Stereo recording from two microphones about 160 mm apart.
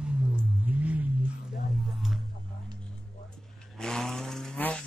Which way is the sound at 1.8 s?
Centre (ahead or behind).